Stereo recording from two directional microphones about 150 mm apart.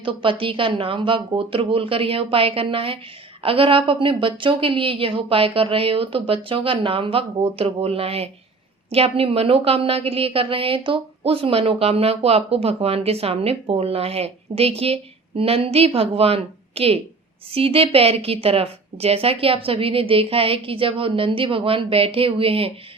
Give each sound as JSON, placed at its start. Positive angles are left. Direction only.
{"t": 0.0, "sound": "a woman's voice", "side_deg": -35}